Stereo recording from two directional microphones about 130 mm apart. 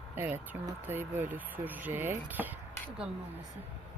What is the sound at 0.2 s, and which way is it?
Speech, 15° right (ahead or behind).